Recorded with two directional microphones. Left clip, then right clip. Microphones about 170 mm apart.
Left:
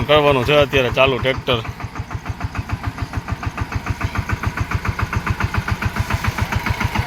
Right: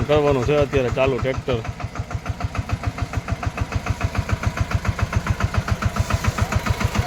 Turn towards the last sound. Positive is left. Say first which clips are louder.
# left 3 dB
turn(degrees=-75)  # may be behind; listen again after turning